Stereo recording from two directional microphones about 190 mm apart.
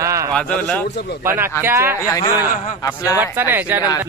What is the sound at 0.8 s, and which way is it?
Speech, 65° left (ahead or behind).